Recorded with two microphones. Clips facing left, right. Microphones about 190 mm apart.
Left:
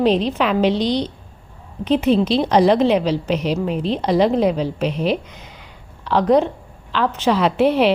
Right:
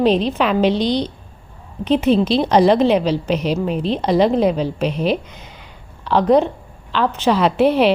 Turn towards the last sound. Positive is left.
turn(degrees=-40)  # may be behind; listen again after turning